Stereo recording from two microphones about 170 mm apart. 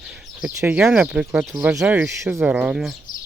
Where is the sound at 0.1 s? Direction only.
10° right (ahead or behind).